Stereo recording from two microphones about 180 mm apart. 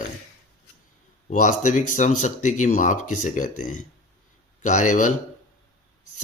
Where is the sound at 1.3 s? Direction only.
45° left (ahead or behind).